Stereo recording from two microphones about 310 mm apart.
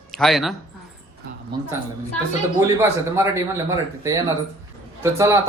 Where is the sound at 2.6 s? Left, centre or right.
Centre.